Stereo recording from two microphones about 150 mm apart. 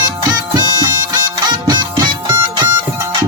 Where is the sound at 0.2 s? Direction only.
30° right (ahead or behind).